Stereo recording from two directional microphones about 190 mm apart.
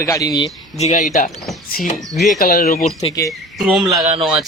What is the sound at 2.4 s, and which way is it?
Speech, 50° left (ahead or behind).